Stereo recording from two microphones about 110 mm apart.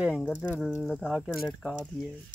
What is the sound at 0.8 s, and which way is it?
Speech, 5° right (ahead or behind).